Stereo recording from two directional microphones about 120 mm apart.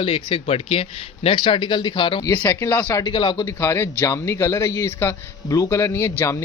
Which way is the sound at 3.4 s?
25° left (ahead or behind).